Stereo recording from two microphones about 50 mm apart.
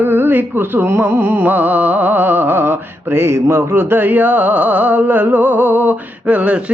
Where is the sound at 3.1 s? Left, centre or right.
Right.